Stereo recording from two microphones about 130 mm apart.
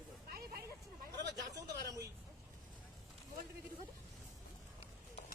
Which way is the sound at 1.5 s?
30° right (ahead or behind).